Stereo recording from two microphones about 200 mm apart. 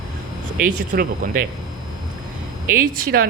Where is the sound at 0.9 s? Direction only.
45° right (ahead or behind).